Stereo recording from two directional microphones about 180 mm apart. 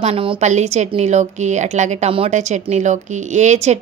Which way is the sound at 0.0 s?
30° right (ahead or behind).